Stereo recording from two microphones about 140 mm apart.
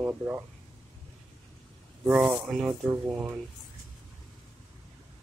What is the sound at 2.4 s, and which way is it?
Speech, 5° right (ahead or behind).